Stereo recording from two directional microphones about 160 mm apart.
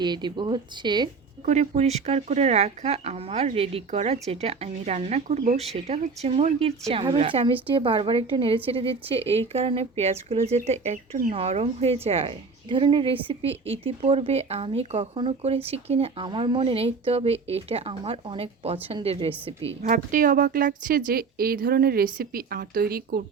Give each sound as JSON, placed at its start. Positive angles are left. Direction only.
{"t": 0.0, "sound": "speech", "side_deg": -30}
{"t": 1.5, "sound": "a woman's voice", "side_deg": -45}
{"t": 19.8, "sound": "a woman's voice", "side_deg": -55}